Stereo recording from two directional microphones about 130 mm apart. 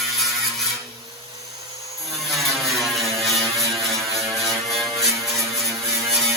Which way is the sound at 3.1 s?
Centre (ahead or behind).